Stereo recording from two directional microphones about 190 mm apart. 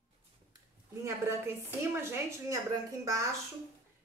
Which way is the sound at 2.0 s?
15° right (ahead or behind).